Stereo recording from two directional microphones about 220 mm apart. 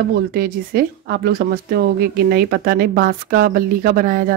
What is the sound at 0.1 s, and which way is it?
Speech, 45° right (ahead or behind).